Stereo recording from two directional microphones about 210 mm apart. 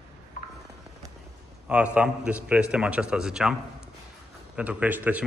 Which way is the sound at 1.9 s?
5° right (ahead or behind).